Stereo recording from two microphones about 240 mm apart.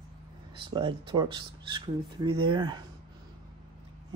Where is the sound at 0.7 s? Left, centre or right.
Centre.